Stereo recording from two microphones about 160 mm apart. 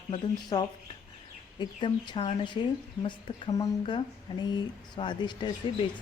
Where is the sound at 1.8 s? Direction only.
30° left (ahead or behind).